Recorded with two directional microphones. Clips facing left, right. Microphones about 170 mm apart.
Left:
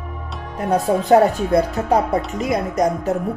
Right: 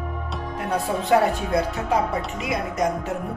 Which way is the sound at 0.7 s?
40° left (ahead or behind).